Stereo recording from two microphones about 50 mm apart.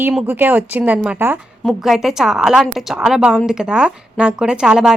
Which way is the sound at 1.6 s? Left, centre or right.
Centre.